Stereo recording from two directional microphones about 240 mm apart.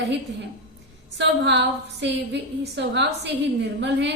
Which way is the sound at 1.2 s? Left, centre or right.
Right.